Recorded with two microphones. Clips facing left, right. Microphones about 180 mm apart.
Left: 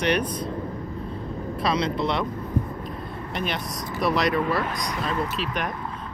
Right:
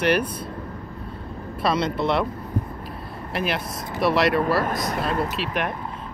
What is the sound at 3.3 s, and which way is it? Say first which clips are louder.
Speech: right 4 dB; 5° right (ahead or behind).